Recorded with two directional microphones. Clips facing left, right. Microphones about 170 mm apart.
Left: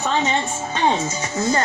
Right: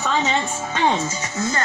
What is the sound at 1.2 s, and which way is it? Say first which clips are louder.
Speech: left 4 dB; 30° left (ahead or behind).